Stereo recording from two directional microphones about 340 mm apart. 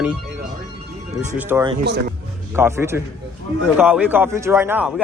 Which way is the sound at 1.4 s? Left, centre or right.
Centre.